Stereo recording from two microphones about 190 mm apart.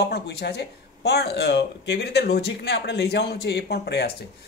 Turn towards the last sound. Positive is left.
turn(degrees=60)  # may be behind; listen again after turning